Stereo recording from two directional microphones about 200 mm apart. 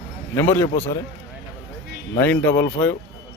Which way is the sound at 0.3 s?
10° left (ahead or behind).